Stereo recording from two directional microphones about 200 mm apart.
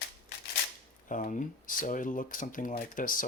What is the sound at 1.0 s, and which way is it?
Speech, 40° left (ahead or behind).